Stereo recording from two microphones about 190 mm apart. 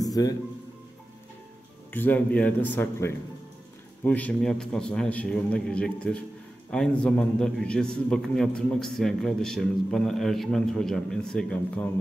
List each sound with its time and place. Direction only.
0.0 s music: 20° left (ahead or behind)
1.9 s a man's voice: 10° left (ahead or behind)